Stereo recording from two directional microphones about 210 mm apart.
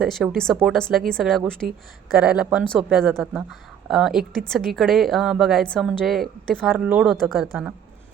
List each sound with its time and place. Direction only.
0.0 s a woman's voice: centre (ahead or behind)